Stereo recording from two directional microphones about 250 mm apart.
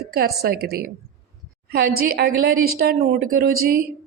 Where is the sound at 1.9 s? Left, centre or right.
Right.